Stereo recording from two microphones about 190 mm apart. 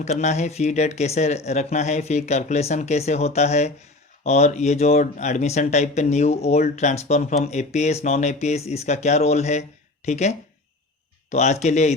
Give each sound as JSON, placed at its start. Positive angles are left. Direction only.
{"t": 0.0, "sound": "speech", "side_deg": 35}